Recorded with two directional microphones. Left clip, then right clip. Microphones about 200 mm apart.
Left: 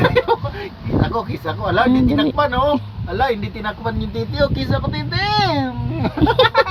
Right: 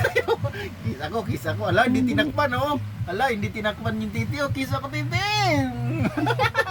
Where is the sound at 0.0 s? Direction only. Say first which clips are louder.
Left 7 dB; 20° right (ahead or behind).